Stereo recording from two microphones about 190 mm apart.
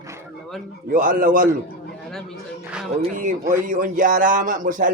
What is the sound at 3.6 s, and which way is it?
Speech, 45° right (ahead or behind).